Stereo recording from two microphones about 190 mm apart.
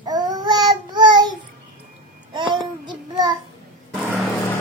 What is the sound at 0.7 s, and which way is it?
Child singing, 25° right (ahead or behind).